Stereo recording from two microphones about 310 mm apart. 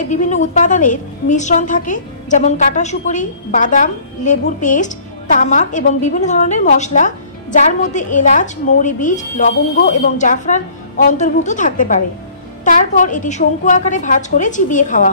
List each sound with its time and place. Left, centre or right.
0.0 s a woman's voice: left